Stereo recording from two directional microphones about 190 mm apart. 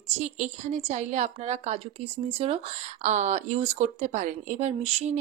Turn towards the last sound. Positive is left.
turn(degrees=-35)  # may be behind; listen again after turning